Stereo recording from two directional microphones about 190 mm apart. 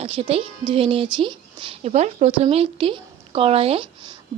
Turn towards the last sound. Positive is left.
turn(degrees=-30)  # may be behind; listen again after turning